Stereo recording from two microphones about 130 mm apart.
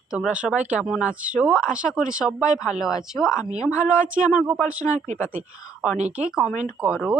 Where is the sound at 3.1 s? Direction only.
25° left (ahead or behind).